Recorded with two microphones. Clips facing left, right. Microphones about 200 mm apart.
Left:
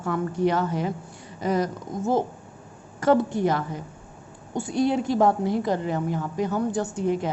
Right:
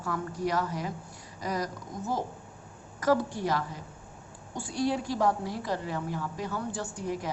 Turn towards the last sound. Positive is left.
turn(degrees=25)  # may be behind; listen again after turning